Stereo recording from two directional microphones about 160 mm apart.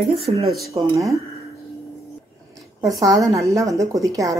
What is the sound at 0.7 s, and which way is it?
Speech, 20° right (ahead or behind).